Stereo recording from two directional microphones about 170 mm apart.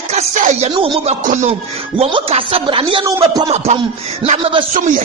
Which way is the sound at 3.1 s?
20° right (ahead or behind).